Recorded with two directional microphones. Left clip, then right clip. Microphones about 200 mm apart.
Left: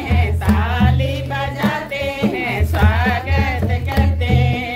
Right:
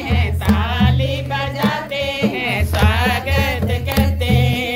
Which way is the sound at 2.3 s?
35° right (ahead or behind).